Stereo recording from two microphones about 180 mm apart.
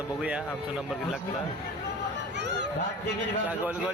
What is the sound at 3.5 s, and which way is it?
Speech, 10° right (ahead or behind).